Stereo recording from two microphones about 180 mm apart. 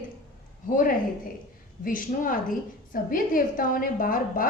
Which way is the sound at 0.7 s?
50° left (ahead or behind).